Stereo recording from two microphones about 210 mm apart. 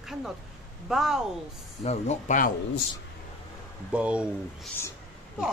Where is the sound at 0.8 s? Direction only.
Centre (ahead or behind).